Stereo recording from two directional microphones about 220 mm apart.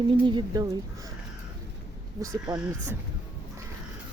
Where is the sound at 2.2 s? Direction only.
15° right (ahead or behind).